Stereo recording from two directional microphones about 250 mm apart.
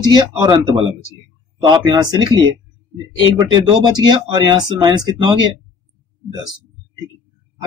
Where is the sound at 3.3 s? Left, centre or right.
Centre.